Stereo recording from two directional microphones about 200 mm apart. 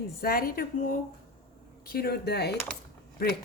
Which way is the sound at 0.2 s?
45° left (ahead or behind).